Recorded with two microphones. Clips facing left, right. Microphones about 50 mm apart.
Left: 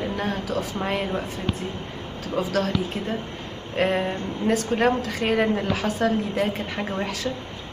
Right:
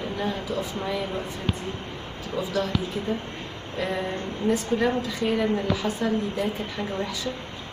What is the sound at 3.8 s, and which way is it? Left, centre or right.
A woman's voice, left.